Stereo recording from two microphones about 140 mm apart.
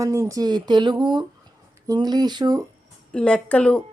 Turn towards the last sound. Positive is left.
turn(degrees=10)  # may be behind; listen again after turning